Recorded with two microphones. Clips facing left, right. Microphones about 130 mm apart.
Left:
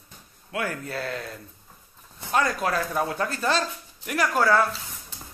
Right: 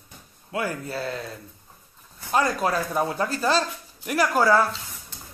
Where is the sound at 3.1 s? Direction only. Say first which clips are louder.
Right 2 dB; 35° right (ahead or behind).